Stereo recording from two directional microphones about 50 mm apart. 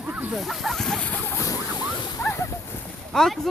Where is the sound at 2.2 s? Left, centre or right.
Left.